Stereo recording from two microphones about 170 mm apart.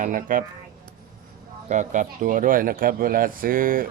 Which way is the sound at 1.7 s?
45° right (ahead or behind).